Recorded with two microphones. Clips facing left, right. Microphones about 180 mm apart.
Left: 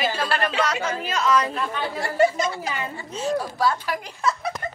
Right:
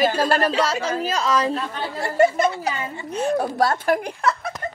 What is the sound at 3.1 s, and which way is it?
A woman's voice, 60° right (ahead or behind).